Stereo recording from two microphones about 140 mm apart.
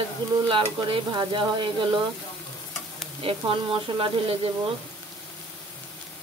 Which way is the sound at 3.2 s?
40° right (ahead or behind).